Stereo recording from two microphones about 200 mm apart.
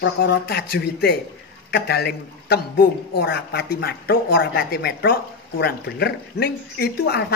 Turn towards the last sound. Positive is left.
turn(degrees=55)  # may be behind; listen again after turning